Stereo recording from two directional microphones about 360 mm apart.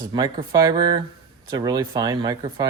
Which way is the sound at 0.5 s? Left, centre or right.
Centre.